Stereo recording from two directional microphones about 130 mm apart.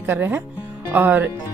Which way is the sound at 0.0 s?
15° right (ahead or behind).